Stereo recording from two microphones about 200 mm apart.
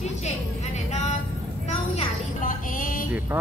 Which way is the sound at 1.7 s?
30° left (ahead or behind).